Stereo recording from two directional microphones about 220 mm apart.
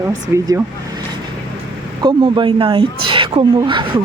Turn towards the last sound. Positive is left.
turn(degrees=-20)  # may be behind; listen again after turning